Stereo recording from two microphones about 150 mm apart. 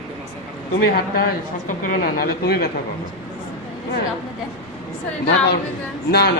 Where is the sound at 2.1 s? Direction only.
90° left.